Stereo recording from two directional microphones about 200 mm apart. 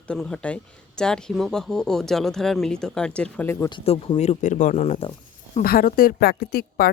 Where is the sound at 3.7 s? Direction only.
30° left (ahead or behind).